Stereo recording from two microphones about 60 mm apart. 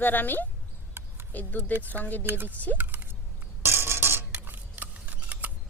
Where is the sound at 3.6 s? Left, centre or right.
Right.